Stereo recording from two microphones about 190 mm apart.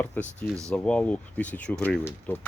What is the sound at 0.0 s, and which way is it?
Speech, 10° left (ahead or behind).